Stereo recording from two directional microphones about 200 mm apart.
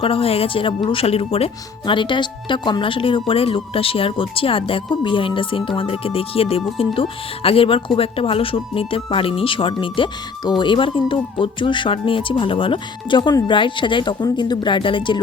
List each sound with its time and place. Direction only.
0.0 s speech: 30° left (ahead or behind)